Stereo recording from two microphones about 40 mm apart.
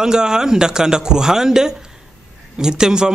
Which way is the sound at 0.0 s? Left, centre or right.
Centre.